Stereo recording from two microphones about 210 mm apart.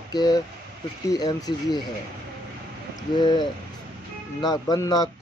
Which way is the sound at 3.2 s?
20° left (ahead or behind).